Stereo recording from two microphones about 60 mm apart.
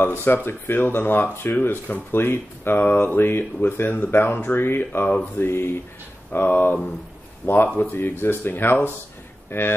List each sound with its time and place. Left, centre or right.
0.0 s speech: left